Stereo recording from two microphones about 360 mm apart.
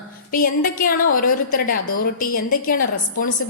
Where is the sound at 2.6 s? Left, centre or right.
Left.